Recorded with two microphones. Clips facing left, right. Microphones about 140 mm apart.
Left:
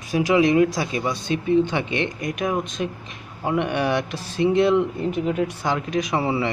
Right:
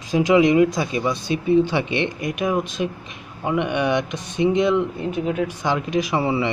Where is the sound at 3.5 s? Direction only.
45° left (ahead or behind).